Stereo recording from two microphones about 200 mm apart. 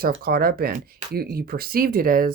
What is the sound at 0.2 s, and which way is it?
Speech, 50° right (ahead or behind).